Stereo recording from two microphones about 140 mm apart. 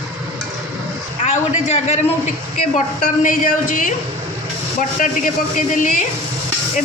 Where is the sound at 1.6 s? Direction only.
50° left (ahead or behind).